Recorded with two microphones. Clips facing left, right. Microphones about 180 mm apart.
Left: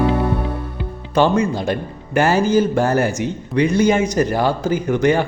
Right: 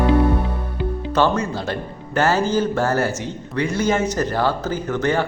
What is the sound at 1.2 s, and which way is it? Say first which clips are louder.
A man's voice: left 4 dB; 15° left (ahead or behind).